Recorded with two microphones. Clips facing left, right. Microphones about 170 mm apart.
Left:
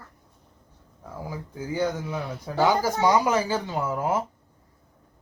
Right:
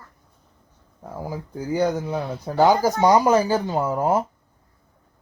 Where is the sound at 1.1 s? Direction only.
40° right (ahead or behind).